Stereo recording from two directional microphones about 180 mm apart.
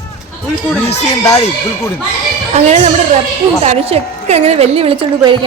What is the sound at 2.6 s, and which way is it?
A woman's voice, 35° right (ahead or behind).